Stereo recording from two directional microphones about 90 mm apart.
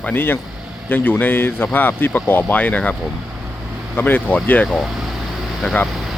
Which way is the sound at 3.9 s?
20° left (ahead or behind).